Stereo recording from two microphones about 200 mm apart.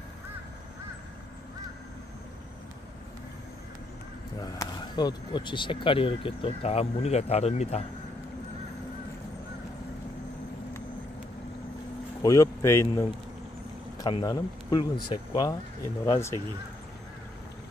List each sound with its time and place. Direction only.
4.4 s speech: 20° left (ahead or behind)
12.2 s speech: 15° left (ahead or behind)